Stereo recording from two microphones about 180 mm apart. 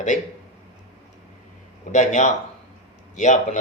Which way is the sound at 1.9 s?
40° left (ahead or behind).